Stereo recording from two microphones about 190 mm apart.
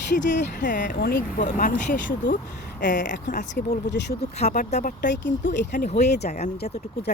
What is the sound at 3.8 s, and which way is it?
Speech, 65° left (ahead or behind).